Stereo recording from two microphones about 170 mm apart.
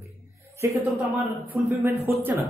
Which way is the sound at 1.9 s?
15° right (ahead or behind).